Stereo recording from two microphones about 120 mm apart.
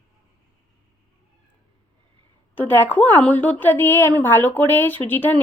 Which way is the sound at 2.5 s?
15° left (ahead or behind).